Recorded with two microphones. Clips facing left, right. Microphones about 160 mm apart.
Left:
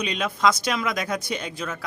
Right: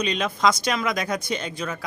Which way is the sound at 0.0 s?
5° left (ahead or behind).